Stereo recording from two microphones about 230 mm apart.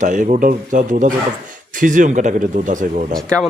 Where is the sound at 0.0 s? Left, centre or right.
Right.